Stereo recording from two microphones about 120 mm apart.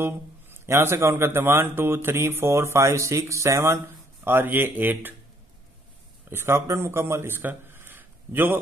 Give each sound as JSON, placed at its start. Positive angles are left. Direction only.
{"t": 0.0, "sound": "speech", "side_deg": -20}
{"t": 6.3, "sound": "a man's voice", "side_deg": -20}